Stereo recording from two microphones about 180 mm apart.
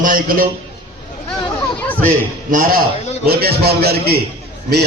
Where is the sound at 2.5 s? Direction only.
55° right (ahead or behind).